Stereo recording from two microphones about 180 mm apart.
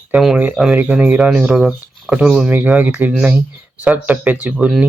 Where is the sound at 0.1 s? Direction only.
5° right (ahead or behind).